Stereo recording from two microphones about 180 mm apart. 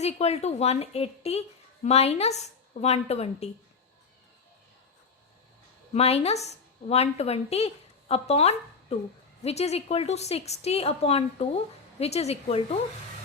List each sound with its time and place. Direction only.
0.0 s a woman's voice: 35° left (ahead or behind)
5.9 s a woman's voice: 35° left (ahead or behind)